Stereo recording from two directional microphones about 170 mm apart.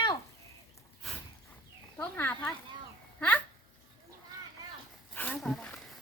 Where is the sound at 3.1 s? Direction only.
10° left (ahead or behind).